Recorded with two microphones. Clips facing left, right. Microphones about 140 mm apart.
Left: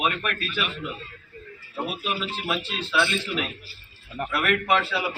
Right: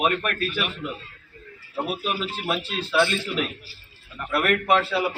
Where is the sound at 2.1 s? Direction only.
40° right (ahead or behind).